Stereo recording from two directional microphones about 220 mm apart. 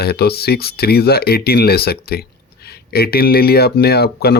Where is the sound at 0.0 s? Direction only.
45° left (ahead or behind).